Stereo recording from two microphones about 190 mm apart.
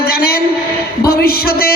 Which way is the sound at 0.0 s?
55° left (ahead or behind).